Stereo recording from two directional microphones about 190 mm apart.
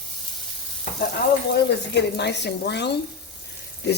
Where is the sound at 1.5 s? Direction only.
65° left (ahead or behind).